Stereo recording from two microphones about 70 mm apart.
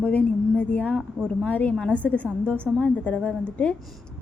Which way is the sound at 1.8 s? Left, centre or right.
Centre.